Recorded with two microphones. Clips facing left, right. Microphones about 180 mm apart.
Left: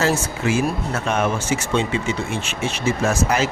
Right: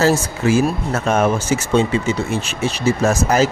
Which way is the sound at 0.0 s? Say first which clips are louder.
Right 4 dB; 40° right (ahead or behind).